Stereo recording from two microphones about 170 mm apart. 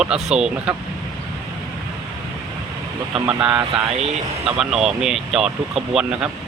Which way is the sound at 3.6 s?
35° right (ahead or behind).